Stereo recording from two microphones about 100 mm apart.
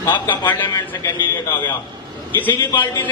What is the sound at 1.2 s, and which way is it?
Speech, 20° left (ahead or behind).